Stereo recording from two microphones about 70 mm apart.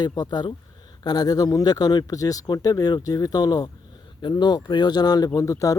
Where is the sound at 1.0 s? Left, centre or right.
Left.